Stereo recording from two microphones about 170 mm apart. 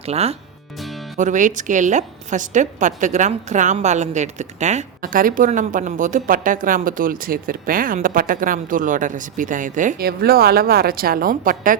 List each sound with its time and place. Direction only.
0.0 s a woman's voice: 35° right (ahead or behind); by 11.8 s 55° right (ahead or behind)